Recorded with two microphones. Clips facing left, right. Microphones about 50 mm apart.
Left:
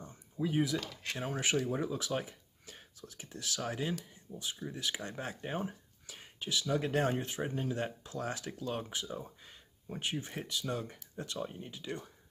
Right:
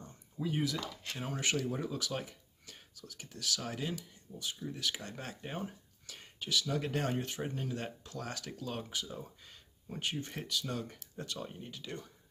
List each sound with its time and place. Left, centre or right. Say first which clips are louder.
0.0 s a sound: left 3 dB; centre
0.7 s speech: left 2 dB; left
5.7 s whispering: left 2 dB; centre
6.5 s speech: left 2 dB; left
11.3 s speech: left 6 dB; centre